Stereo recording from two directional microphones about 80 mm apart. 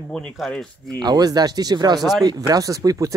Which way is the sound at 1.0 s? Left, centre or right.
Right.